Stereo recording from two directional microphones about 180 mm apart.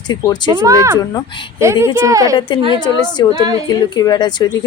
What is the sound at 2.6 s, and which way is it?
Speech, 25° left (ahead or behind).